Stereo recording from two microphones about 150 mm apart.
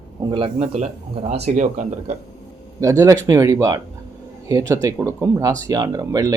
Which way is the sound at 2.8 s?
20° right (ahead or behind).